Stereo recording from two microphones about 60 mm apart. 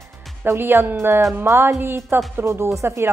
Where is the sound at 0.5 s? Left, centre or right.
Right.